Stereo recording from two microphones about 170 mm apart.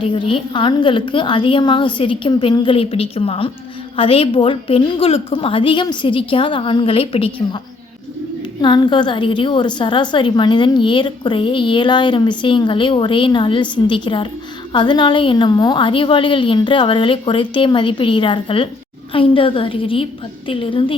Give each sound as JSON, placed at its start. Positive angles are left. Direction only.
{"t": 0.0, "sound": "a woman's voice", "side_deg": 30}
{"t": 8.6, "sound": "a woman's voice", "side_deg": 25}